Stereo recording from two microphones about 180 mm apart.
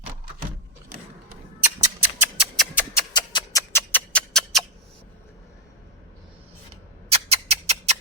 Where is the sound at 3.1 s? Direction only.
25° left (ahead or behind).